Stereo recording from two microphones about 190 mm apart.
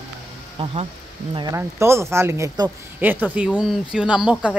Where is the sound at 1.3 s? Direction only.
25° right (ahead or behind).